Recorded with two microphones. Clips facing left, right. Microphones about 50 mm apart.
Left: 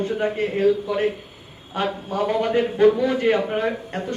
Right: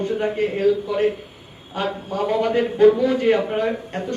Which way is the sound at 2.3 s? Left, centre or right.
Centre.